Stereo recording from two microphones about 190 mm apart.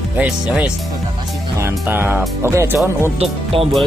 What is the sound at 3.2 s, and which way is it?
Speech, 30° right (ahead or behind).